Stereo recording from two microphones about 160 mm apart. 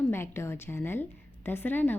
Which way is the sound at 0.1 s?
15° left (ahead or behind).